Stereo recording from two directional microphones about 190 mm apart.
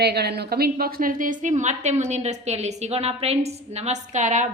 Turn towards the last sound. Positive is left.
turn(degrees=-40)  # may be behind; listen again after turning